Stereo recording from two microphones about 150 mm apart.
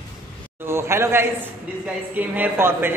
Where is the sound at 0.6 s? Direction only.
15° right (ahead or behind).